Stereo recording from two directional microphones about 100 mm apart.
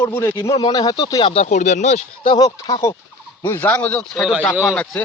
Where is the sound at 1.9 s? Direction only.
90° left.